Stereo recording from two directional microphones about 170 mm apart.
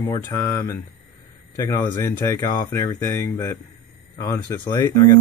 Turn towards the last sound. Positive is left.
turn(degrees=20)  # may be behind; listen again after turning